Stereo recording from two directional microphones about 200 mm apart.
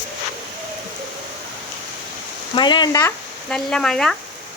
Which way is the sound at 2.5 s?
20° left (ahead or behind).